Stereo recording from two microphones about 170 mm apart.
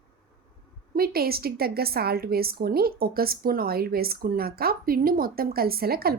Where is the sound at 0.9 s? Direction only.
65° right (ahead or behind).